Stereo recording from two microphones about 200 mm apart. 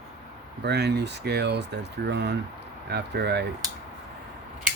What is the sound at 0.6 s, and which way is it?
Speech, 55° right (ahead or behind).